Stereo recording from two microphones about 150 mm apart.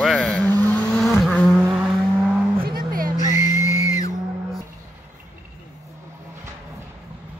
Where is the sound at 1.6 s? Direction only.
10° right (ahead or behind).